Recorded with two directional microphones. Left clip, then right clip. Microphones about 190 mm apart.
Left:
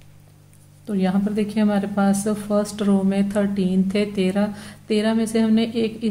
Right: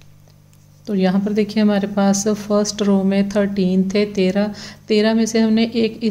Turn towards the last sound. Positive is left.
turn(degrees=-30)  # may be behind; listen again after turning